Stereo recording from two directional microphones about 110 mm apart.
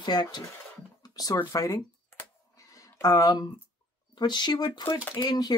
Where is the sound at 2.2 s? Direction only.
30° left (ahead or behind).